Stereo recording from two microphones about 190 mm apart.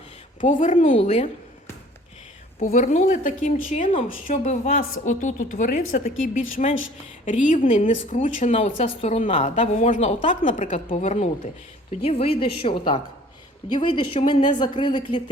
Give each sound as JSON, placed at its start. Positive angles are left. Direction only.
{"t": 0.4, "sound": "speech", "side_deg": 45}
{"t": 2.6, "sound": "a woman's voice", "side_deg": 40}